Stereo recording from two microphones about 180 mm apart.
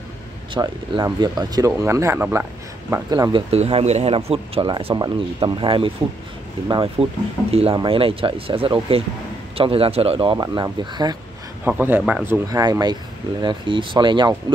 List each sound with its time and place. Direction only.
0.6 s speech: 20° right (ahead or behind)
11.6 s speech: 10° right (ahead or behind)